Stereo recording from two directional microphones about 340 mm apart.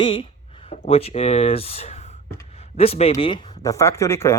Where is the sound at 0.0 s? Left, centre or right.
Centre.